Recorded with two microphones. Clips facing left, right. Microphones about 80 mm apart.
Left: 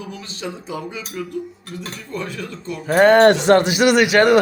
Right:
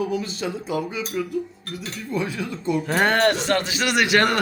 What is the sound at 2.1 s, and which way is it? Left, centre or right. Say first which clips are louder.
Speech: right 3 dB; centre.